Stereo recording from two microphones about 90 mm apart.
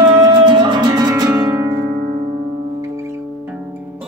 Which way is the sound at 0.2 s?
55° right (ahead or behind).